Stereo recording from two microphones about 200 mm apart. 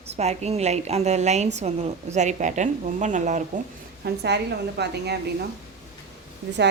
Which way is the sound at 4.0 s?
55° right (ahead or behind).